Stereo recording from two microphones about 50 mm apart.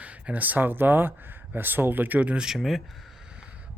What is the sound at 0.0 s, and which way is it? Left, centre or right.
Speech, right.